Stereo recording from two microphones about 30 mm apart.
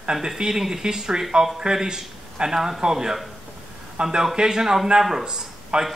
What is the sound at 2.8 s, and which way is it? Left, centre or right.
Speech, right.